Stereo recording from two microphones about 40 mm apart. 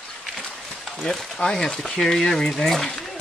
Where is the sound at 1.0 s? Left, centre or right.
Centre.